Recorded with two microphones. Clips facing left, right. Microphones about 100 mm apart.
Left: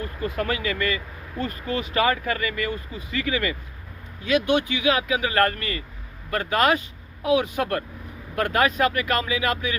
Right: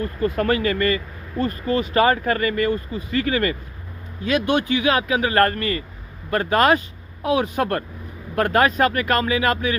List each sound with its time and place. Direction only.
0.3 s speech: 45° right (ahead or behind)